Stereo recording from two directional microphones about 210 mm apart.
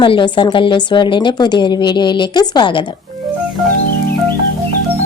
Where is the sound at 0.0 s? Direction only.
25° left (ahead or behind).